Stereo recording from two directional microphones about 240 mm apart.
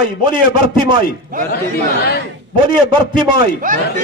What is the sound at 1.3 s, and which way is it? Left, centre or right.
Speech, right.